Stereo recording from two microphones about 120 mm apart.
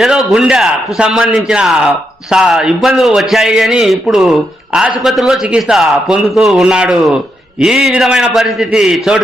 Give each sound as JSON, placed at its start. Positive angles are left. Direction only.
{"t": 0.0, "sound": "a man's voice", "side_deg": 0}